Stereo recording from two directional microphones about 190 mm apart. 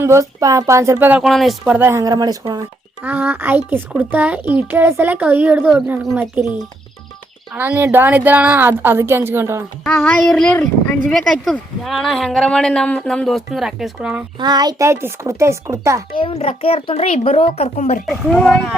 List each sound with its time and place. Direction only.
0.0 s a child's voice: 15° right (ahead or behind)
7.5 s a child's voice: 10° right (ahead or behind)
9.8 s speech: 5° left (ahead or behind)
14.3 s a child's voice: 20° right (ahead or behind)
16.1 s a child's voice: 30° left (ahead or behind)
18.0 s speech: centre (ahead or behind)